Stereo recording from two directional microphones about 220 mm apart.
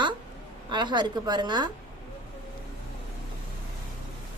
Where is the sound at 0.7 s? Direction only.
20° right (ahead or behind).